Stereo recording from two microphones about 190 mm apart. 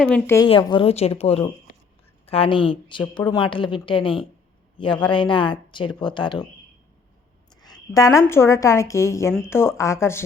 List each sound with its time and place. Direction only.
0.1 s speech: 10° left (ahead or behind)
0.4 s speech: 25° left (ahead or behind)
7.5 s a woman's voice: 20° left (ahead or behind)